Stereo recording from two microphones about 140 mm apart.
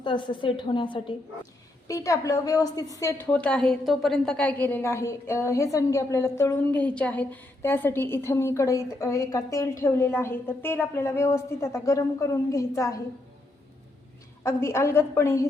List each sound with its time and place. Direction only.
0.0 s a woman's voice: 35° left (ahead or behind)
1.9 s a woman's voice: 25° left (ahead or behind)
3.3 s a woman's voice: 5° left (ahead or behind); by 13.0 s 25° left (ahead or behind)
14.4 s a woman's voice: 20° left (ahead or behind)